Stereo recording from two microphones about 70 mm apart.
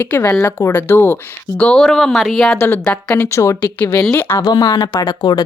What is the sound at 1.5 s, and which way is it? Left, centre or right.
Speech, centre.